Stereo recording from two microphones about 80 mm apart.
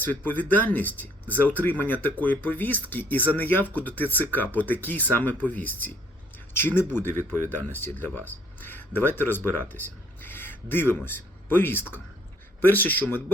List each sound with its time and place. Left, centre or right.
0.0 s speech: left